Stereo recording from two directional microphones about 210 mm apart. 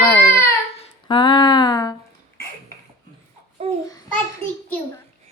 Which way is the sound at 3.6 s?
25° right (ahead or behind).